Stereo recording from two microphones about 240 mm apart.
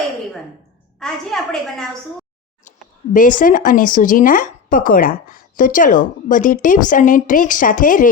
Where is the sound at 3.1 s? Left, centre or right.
Left.